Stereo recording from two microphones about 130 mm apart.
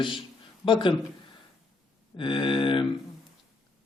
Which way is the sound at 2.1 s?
40° left (ahead or behind).